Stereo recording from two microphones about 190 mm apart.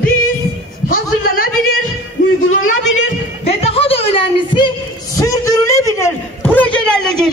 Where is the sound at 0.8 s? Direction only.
50° left (ahead or behind).